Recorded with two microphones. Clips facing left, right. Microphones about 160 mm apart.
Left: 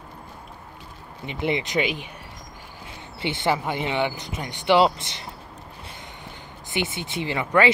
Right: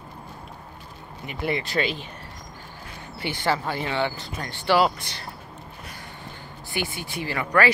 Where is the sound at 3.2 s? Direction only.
20° left (ahead or behind).